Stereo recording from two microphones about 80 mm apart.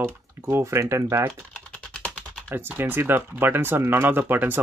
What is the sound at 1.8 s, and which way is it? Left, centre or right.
Typing, centre.